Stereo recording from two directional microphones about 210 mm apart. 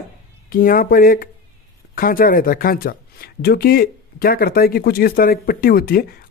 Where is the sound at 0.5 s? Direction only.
40° left (ahead or behind).